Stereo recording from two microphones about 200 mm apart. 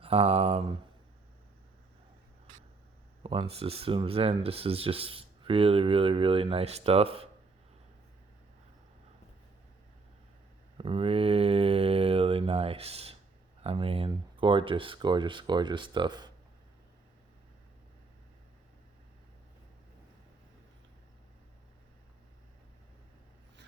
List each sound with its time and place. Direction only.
0.0 s speech: 30° right (ahead or behind)
3.2 s speech: 25° right (ahead or behind)
10.8 s speech: 25° right (ahead or behind)